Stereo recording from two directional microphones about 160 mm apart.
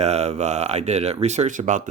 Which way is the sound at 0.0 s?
45° right (ahead or behind).